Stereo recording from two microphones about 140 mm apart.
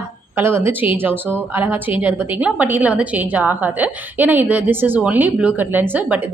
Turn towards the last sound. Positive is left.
turn(degrees=-15)  # may be behind; listen again after turning